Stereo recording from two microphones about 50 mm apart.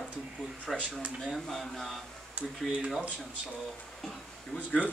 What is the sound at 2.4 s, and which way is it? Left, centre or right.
Speech, right.